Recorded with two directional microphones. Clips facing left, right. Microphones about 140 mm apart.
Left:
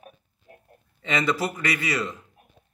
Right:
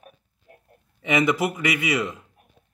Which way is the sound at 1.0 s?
15° right (ahead or behind).